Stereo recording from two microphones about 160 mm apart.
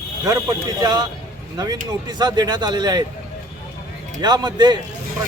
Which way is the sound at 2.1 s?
25° right (ahead or behind).